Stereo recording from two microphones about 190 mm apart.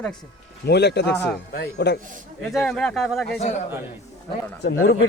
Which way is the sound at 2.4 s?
Centre (ahead or behind).